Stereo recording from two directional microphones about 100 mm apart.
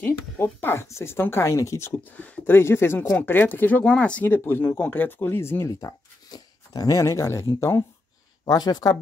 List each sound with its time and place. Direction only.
0.0 s speech: 25° left (ahead or behind)
2.1 s speech: 15° left (ahead or behind); by 7.8 s 30° left (ahead or behind)
8.5 s speech: 40° left (ahead or behind)